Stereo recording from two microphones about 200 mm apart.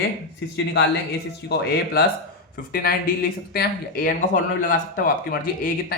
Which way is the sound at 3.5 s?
50° left (ahead or behind).